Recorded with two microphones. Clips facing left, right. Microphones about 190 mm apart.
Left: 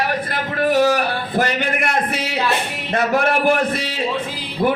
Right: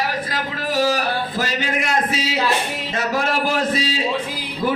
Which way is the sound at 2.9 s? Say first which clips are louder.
Left 5 dB; 60° left (ahead or behind).